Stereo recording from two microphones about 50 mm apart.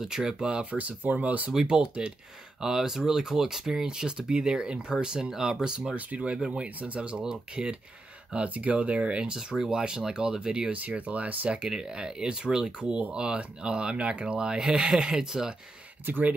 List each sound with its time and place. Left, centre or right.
0.0 s speech: centre
0.7 s speech: right
1.5 s speech: centre
5.9 s speech: right
8.5 s speech: right
10.7 s speech: right
11.5 s speech: centre
16.1 s speech: right